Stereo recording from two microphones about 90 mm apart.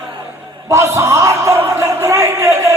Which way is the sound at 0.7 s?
35° right (ahead or behind).